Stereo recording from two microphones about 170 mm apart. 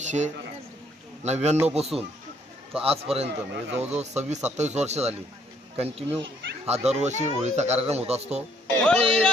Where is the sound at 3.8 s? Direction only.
40° right (ahead or behind).